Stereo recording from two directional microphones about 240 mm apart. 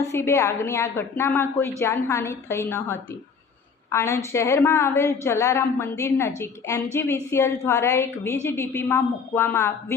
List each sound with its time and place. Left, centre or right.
0.1 s a woman's voice: centre